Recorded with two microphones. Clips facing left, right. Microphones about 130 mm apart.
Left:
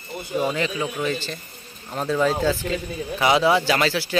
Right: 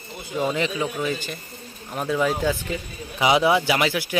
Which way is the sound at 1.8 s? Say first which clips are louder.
Left 1 dB; 10° right (ahead or behind).